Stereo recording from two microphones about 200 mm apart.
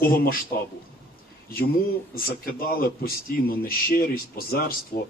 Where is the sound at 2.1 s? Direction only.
45° left (ahead or behind).